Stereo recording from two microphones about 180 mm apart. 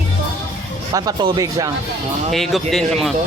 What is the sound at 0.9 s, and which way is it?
Speech, 25° right (ahead or behind).